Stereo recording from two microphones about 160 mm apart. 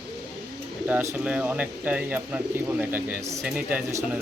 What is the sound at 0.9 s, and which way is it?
Speech, 10° right (ahead or behind).